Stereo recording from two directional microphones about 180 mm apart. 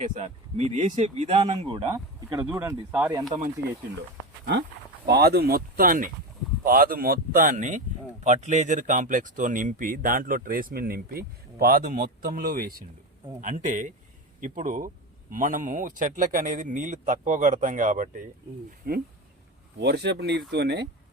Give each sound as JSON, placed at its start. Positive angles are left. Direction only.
{"t": 0.0, "sound": "speech", "side_deg": -35}
{"t": 1.9, "sound": "speech", "side_deg": -15}
{"t": 5.0, "sound": "speech", "side_deg": -65}
{"t": 13.4, "sound": "speech", "side_deg": -45}
{"t": 18.8, "sound": "speech", "side_deg": -55}
{"t": 19.8, "sound": "speech", "side_deg": -70}